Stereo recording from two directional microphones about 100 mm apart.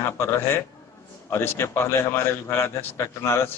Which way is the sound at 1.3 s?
25° left (ahead or behind).